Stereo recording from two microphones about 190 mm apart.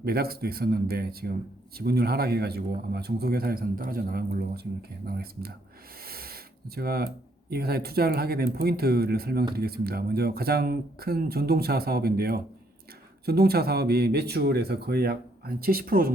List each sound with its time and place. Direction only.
0.0 s speech: 55° right (ahead or behind)
6.0 s a sound: 50° right (ahead or behind)
7.5 s speech: 55° right (ahead or behind)